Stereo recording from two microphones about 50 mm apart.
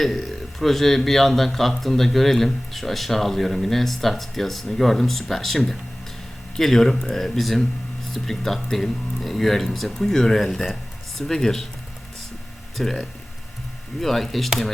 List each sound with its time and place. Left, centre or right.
0.0 s speech: centre
12.7 s speech: centre